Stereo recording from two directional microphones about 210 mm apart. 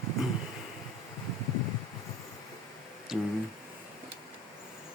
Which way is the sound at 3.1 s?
Centre (ahead or behind).